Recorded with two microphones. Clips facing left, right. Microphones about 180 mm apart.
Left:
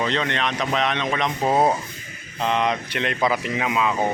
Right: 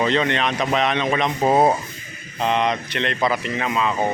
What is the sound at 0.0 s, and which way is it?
Speech, 5° right (ahead or behind).